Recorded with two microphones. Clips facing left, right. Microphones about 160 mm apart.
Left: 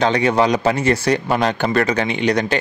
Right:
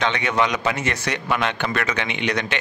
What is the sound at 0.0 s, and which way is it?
A man's voice, 35° left (ahead or behind).